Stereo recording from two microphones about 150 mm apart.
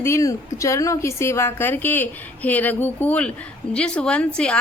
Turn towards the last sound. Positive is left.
turn(degrees=5)  # may be behind; listen again after turning